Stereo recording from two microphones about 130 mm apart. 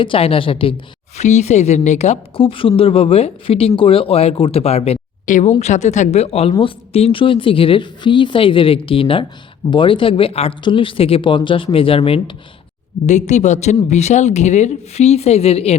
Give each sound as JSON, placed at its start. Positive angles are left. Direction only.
{"t": 0.0, "sound": "speech", "side_deg": 45}
{"t": 1.2, "sound": "speech", "side_deg": 60}
{"t": 5.2, "sound": "speech", "side_deg": 70}
{"t": 13.1, "sound": "speech", "side_deg": 65}